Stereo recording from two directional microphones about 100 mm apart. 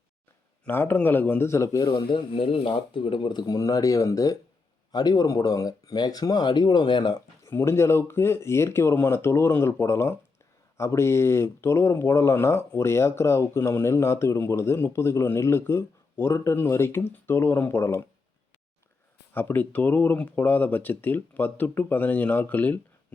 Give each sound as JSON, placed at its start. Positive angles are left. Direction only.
{"t": 0.6, "sound": "speech", "side_deg": 20}
{"t": 1.9, "sound": "speech", "side_deg": 55}
{"t": 2.3, "sound": "speech", "side_deg": 65}
{"t": 7.4, "sound": "speech", "side_deg": 25}
{"t": 19.3, "sound": "speech", "side_deg": 20}